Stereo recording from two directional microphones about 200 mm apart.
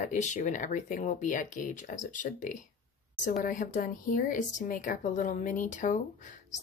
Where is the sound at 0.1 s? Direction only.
35° left (ahead or behind).